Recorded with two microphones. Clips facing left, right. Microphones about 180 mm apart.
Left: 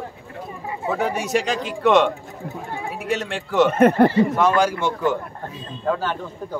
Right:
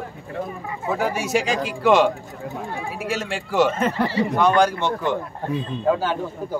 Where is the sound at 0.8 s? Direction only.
Centre (ahead or behind).